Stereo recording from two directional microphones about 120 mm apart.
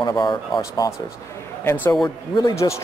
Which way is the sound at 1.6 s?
15° left (ahead or behind).